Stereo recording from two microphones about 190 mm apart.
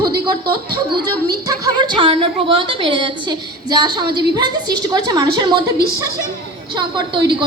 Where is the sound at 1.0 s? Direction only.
20° right (ahead or behind).